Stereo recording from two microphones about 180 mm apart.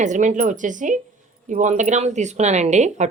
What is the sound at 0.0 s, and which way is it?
A woman's voice, 45° right (ahead or behind).